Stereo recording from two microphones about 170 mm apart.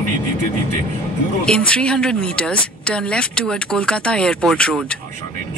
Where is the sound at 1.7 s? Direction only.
5° left (ahead or behind).